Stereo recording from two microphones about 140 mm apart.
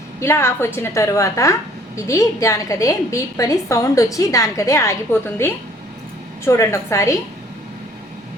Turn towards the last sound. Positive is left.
turn(degrees=20)  # may be behind; listen again after turning